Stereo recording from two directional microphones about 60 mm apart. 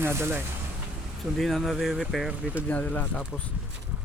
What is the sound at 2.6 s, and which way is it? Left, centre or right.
Speech, left.